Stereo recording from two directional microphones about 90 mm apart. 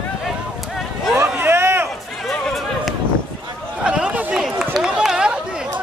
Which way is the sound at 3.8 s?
10° right (ahead or behind).